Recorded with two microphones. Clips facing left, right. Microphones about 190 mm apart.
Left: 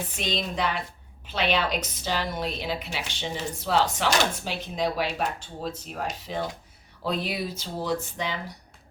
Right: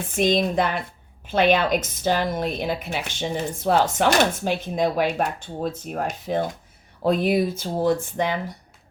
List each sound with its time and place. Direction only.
0.1 s a woman's voice: 50° right (ahead or behind)